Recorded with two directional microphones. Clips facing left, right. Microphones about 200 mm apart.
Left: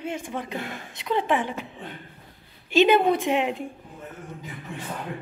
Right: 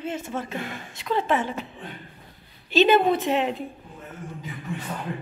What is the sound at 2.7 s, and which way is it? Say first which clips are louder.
A woman's voice: even; 15° left (ahead or behind).